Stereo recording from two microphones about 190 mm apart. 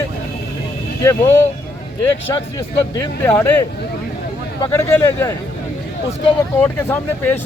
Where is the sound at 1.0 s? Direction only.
15° left (ahead or behind).